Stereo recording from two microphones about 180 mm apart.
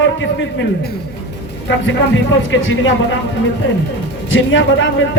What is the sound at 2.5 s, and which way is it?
Speech, 90° left.